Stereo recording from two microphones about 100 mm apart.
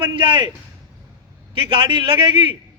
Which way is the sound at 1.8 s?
55° right (ahead or behind).